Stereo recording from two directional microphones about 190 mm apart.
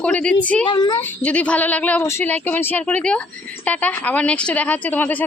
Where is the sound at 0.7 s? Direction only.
20° left (ahead or behind).